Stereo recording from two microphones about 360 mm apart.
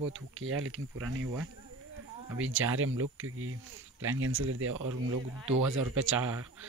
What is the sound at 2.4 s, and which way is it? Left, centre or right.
Speech, right.